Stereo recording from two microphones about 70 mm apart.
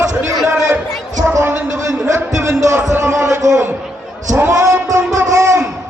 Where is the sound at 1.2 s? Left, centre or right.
Right.